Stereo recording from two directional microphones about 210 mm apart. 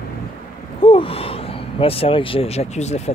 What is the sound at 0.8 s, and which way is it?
Speech, 25° left (ahead or behind).